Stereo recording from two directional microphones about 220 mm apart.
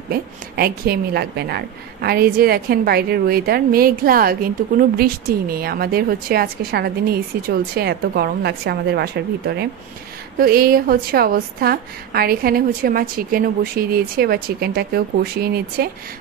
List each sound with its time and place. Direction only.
0.1 s a woman's voice: 45° right (ahead or behind)